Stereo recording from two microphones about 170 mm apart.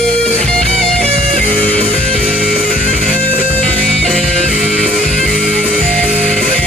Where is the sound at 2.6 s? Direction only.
55° left (ahead or behind).